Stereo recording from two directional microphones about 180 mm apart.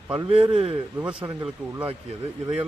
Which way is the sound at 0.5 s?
35° right (ahead or behind).